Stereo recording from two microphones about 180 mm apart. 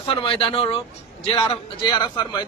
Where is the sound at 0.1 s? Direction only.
30° left (ahead or behind).